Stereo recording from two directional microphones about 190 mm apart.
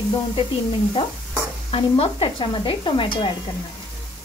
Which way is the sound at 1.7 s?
30° left (ahead or behind).